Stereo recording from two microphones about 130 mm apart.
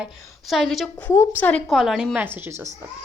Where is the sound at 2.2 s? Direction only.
15° right (ahead or behind).